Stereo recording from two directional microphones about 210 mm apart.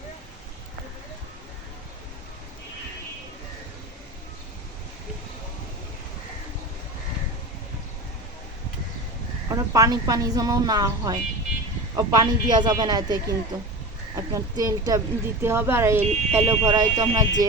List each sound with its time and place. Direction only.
9.5 s speech: 15° right (ahead or behind)